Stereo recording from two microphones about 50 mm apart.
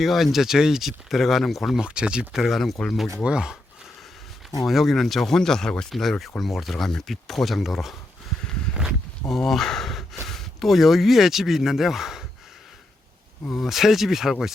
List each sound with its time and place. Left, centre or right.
0.0 s speech: centre
1.8 s speech: centre
2.3 s speech: centre
3.2 s speech: centre
4.6 s speech: centre
8.8 s a sound: centre
9.3 s speech: centre
13.5 s speech: centre